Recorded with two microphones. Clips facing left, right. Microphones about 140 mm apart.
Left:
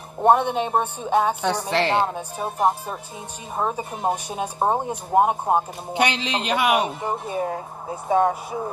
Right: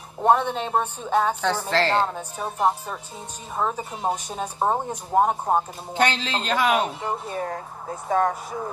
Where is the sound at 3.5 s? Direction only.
10° left (ahead or behind).